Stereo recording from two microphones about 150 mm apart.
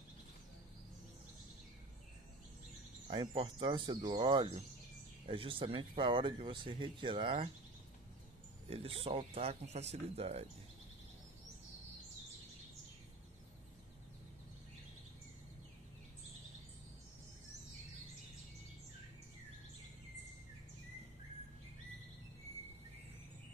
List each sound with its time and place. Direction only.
3.1 s speech: 30° right (ahead or behind)
8.6 s speech: 40° right (ahead or behind)